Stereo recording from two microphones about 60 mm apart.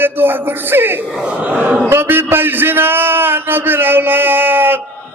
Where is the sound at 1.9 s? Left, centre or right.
Right.